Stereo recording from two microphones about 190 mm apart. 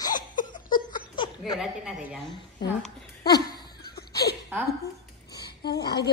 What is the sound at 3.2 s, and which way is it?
Laughter, 20° left (ahead or behind).